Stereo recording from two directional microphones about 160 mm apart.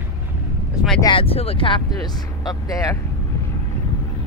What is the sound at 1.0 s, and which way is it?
Speech, 35° left (ahead or behind).